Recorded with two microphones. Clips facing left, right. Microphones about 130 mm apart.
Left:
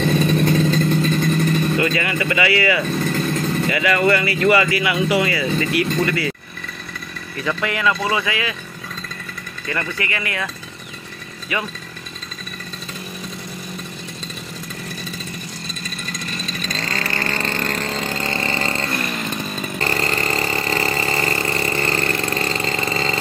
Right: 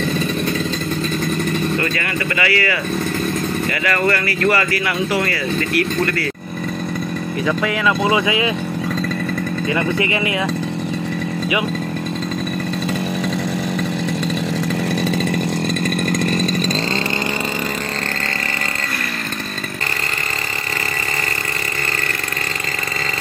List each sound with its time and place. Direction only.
1.8 s speech: 15° left (ahead or behind)
3.8 s speech: 10° left (ahead or behind)
7.4 s speech: 5° right (ahead or behind)
8.0 s speech: 20° right (ahead or behind)
9.8 s speech: 20° right (ahead or behind)
16.1 s chainsaw: 55° right (ahead or behind)